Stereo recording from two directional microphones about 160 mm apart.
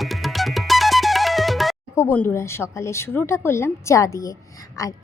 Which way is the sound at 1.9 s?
15° left (ahead or behind).